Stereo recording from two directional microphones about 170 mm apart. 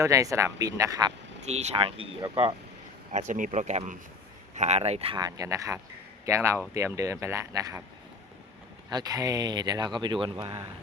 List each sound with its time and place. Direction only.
0.0 s speech: 20° right (ahead or behind)
1.5 s speech: 40° right (ahead or behind)
3.1 s speech: 45° right (ahead or behind)
5.1 s speech: 20° right (ahead or behind)
8.9 s speech: 20° right (ahead or behind)